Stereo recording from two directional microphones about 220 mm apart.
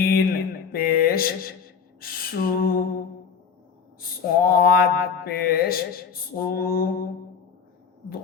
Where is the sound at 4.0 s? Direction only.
40° left (ahead or behind).